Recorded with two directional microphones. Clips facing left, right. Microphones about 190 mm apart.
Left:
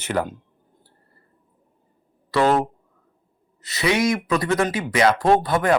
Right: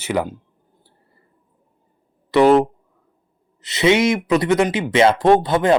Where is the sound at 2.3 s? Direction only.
20° right (ahead or behind).